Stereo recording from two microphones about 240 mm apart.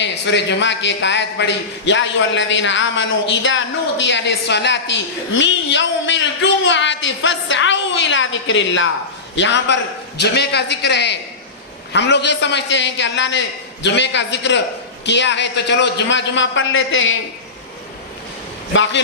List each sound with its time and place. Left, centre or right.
0.0 s a man's voice: left
18.7 s a man's voice: left